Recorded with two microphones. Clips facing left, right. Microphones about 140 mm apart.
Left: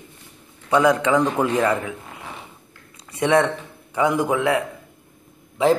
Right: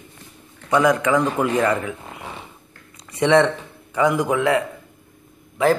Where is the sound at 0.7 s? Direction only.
10° left (ahead or behind).